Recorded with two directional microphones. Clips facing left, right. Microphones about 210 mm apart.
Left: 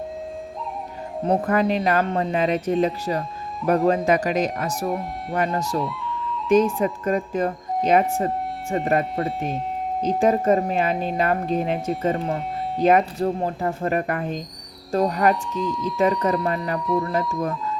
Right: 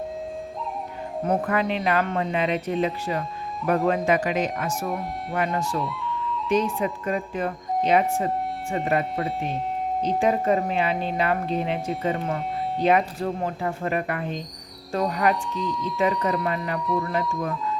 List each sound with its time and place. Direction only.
1.2 s speech: 35° left (ahead or behind)
5.8 s music: centre (ahead or behind)
6.5 s speech: 45° left (ahead or behind)
9.2 s speech: centre (ahead or behind)
10.2 s speech: 45° left (ahead or behind)
12.0 s speech: 35° left (ahead or behind)
15.5 s speech: centre (ahead or behind)
16.0 s speech: 40° left (ahead or behind)